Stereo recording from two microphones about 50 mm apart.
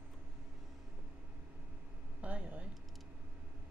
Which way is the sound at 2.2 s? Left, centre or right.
Right.